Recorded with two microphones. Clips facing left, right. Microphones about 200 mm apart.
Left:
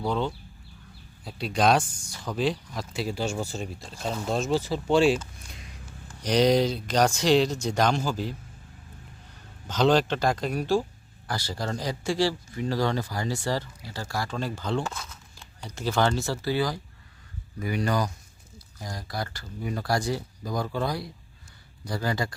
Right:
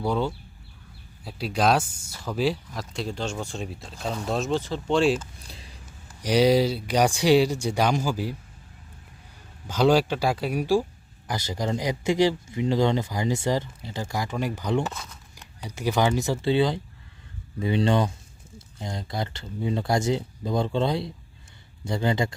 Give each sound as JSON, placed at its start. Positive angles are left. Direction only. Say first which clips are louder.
{"t": 0.0, "sound": "speech", "louder": "right 2 dB", "side_deg": -10}
{"t": 5.5, "sound": "a sound", "louder": "right 1 dB", "side_deg": -30}
{"t": 6.2, "sound": "speech", "louder": "right 2 dB", "side_deg": -5}
{"t": 9.6, "sound": "speech", "louder": "right 2 dB", "side_deg": -10}
{"t": 14.8, "sound": "speech", "louder": "right 1 dB", "side_deg": 0}
{"t": 15.4, "sound": "speech", "louder": "right 2 dB", "side_deg": -15}